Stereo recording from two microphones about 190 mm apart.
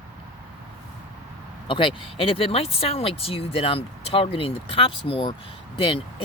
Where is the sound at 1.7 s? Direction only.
25° left (ahead or behind).